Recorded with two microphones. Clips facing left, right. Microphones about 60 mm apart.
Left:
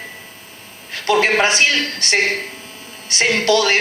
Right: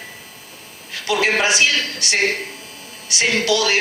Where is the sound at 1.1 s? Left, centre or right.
Left.